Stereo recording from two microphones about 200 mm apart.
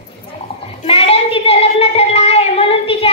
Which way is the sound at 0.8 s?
30° left (ahead or behind).